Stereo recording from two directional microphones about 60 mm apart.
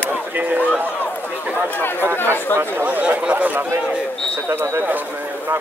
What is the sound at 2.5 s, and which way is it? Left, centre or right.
Speech, right.